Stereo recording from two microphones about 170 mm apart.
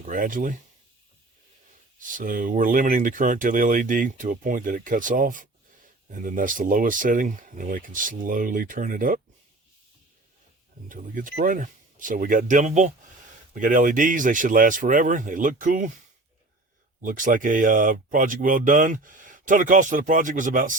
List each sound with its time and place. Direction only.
0.0 s speech: 50° right (ahead or behind)
2.0 s speech: 50° right (ahead or behind)
10.8 s speech: 50° right (ahead or behind)
17.0 s speech: 50° right (ahead or behind)